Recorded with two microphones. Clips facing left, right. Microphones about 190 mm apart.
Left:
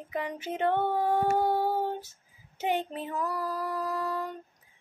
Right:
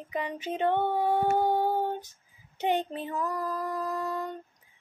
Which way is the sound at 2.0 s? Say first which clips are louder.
Even; 5° left (ahead or behind).